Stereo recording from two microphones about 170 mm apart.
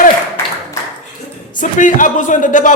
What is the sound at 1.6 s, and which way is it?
A man's voice, 50° left (ahead or behind).